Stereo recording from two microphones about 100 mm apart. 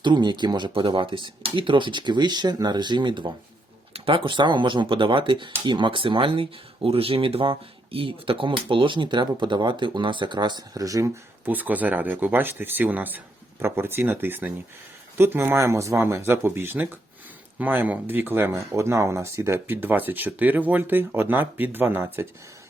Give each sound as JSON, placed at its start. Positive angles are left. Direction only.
{"t": 0.0, "sound": "speech", "side_deg": -50}
{"t": 3.9, "sound": "speech", "side_deg": -65}
{"t": 11.5, "sound": "speech", "side_deg": -15}